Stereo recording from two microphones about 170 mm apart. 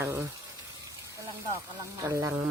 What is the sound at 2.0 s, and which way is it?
Speech, 15° right (ahead or behind).